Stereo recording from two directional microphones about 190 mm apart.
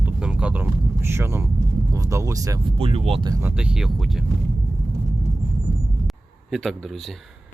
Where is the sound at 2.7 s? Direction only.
30° right (ahead or behind).